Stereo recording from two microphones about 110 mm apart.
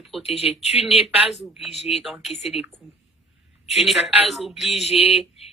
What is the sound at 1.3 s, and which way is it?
Speech, 80° left.